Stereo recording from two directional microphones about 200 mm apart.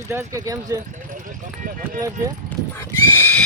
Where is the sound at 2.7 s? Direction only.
10° left (ahead or behind).